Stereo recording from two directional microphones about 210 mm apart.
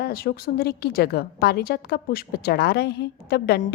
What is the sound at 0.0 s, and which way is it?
A woman's voice, 45° left (ahead or behind).